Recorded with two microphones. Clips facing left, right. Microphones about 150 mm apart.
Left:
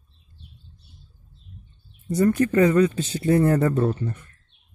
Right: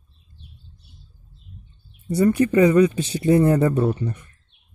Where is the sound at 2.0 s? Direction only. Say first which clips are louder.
Right 2 dB; 10° right (ahead or behind).